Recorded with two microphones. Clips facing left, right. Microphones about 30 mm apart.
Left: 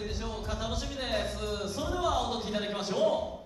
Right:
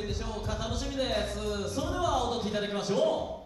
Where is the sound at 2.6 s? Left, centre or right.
Centre.